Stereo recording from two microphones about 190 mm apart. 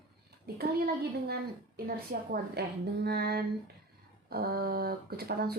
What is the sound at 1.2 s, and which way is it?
A woman's voice, 55° right (ahead or behind).